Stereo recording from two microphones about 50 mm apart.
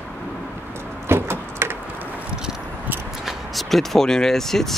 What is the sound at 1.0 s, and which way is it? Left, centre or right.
Vehicle, right.